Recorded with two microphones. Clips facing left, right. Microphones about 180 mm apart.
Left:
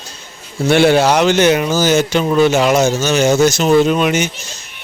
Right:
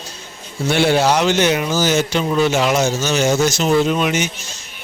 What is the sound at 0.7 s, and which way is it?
Speech, 60° left (ahead or behind).